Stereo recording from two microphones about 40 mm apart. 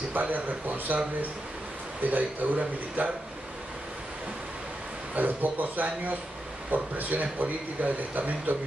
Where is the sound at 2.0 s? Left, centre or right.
Right.